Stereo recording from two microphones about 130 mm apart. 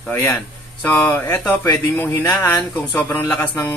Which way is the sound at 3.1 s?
20° left (ahead or behind).